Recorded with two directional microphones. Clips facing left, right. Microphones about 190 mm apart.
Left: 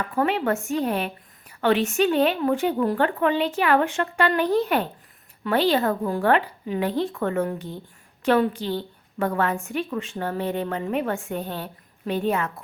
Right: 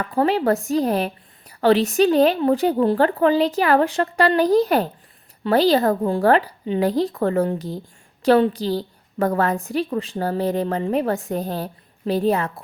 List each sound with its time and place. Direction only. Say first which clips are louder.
0.1 s a woman's voice: right 5 dB; 35° right (ahead or behind)